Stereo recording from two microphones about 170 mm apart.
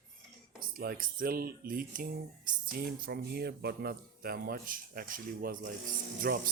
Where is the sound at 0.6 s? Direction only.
60° right (ahead or behind).